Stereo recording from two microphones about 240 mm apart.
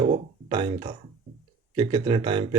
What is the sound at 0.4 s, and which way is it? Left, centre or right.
Speech, right.